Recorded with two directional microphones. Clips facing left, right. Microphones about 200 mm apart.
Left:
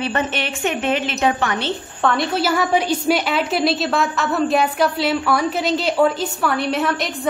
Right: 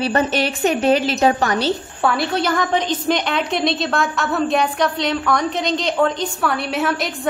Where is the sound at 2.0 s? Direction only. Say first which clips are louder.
Even; centre (ahead or behind).